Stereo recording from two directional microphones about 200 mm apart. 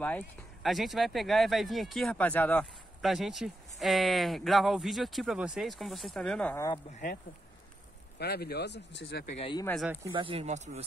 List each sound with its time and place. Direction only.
0.0 s speech: 5° left (ahead or behind)
8.2 s speech: 50° left (ahead or behind)
9.4 s speech: 25° left (ahead or behind)
10.1 s speech: 25° right (ahead or behind)